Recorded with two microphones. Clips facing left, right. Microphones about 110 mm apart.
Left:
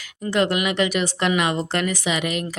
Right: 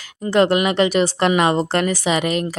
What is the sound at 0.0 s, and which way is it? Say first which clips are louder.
A woman's voice: right 5 dB; 30° right (ahead or behind).